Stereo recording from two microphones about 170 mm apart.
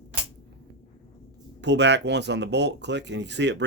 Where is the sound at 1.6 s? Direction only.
90° right.